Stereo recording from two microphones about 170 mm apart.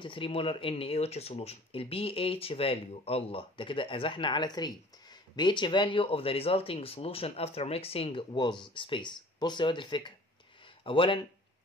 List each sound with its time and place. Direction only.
0.0 s speech: 30° left (ahead or behind)